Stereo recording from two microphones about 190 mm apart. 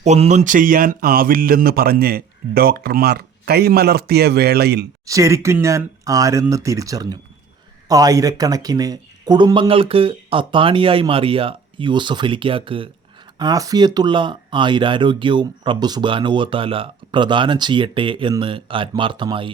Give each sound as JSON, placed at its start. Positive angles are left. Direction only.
{"t": 0.0, "sound": "speech", "side_deg": -35}
{"t": 5.0, "sound": "speech", "side_deg": -15}